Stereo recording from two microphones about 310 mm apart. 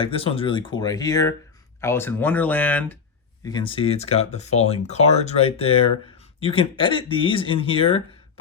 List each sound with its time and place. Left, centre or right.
0.0 s speech: centre